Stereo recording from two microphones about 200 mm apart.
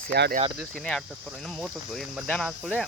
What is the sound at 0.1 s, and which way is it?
Speech, 55° right (ahead or behind).